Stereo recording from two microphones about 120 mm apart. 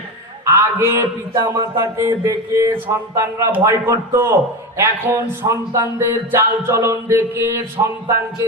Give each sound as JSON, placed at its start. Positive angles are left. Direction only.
{"t": 0.4, "sound": "music", "side_deg": -25}